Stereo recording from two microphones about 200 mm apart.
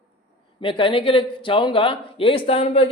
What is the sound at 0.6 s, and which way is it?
Speech, 25° left (ahead or behind).